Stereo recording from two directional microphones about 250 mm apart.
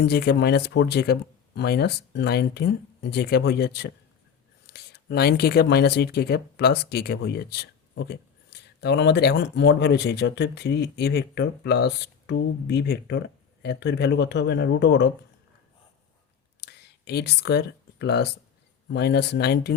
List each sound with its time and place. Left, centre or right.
0.0 s speech: left
16.6 s a sound: left
18.9 s speech: left